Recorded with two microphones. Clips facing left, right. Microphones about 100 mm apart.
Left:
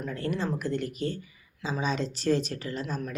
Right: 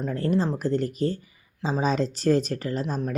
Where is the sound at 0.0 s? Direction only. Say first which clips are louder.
Right 6 dB; 35° right (ahead or behind).